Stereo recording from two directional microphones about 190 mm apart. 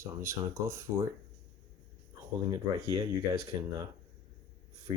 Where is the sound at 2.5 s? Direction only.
20° right (ahead or behind).